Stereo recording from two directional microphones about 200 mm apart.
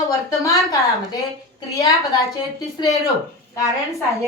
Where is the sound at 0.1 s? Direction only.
15° left (ahead or behind).